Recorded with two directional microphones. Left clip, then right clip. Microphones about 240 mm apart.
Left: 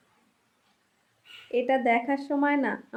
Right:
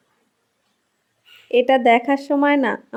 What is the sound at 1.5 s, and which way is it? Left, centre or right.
Speech, right.